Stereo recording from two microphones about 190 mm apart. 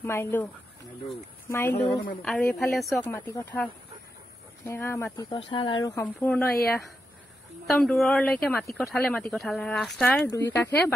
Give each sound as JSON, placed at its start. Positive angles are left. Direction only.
{"t": 0.0, "sound": "speech", "side_deg": 10}
{"t": 1.5, "sound": "speech", "side_deg": 10}
{"t": 3.1, "sound": "speech", "side_deg": 10}
{"t": 7.6, "sound": "speech", "side_deg": 0}